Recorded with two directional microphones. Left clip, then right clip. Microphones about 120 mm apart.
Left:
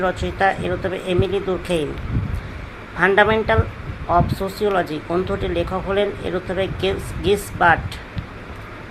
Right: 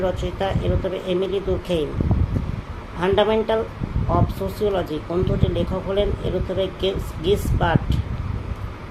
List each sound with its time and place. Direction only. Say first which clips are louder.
0.0 s speech: left 5 dB; 25° left (ahead or behind)
3.0 s speech: left 4 dB; 25° left (ahead or behind)